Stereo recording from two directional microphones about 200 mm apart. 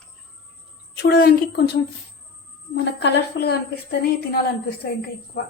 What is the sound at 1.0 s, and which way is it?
Speech, 50° left (ahead or behind).